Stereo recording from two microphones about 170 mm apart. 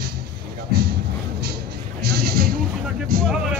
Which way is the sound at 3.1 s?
60° right (ahead or behind).